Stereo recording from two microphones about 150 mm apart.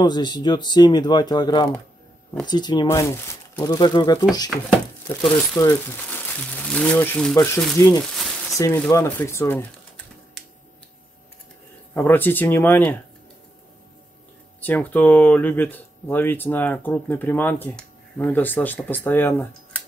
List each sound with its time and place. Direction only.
0.0 s speech: 30° left (ahead or behind)
5.2 s speech: 5° left (ahead or behind)
5.6 s speech: 15° left (ahead or behind)
7.3 s speech: 20° left (ahead or behind)
8.0 s a sound: centre (ahead or behind)
8.5 s speech: 20° left (ahead or behind)
11.9 s speech: 15° left (ahead or behind)
14.6 s speech: 10° left (ahead or behind)